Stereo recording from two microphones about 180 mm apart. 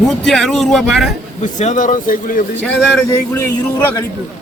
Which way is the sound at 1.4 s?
40° left (ahead or behind).